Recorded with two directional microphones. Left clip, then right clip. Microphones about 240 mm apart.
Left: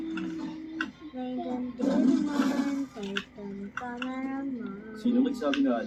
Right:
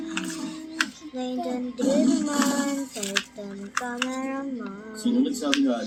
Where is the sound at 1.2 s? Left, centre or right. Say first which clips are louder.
Right 5 dB; right.